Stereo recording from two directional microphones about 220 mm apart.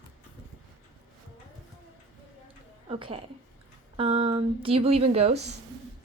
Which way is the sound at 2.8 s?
25° right (ahead or behind).